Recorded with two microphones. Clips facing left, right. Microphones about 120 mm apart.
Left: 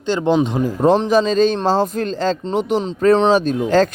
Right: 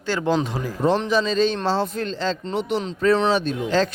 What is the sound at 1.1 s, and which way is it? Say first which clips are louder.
Speech: left 5 dB; 45° left (ahead or behind).